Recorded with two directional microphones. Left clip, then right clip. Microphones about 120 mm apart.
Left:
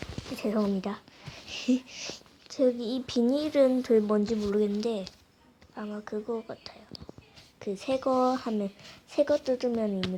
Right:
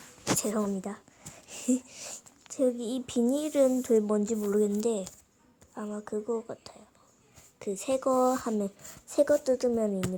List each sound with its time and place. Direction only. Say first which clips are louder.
0.3 s speech: left 6 dB; 5° right (ahead or behind)
1.5 s a woman's voice: left 2 dB; 20° right (ahead or behind)
4.8 s speech: right 1 dB; 40° right (ahead or behind)
5.7 s a woman's voice: right 1 dB; 25° right (ahead or behind)
7.6 s a woman's voice: even; 15° right (ahead or behind)
9.6 s speech: right 2 dB; 10° right (ahead or behind)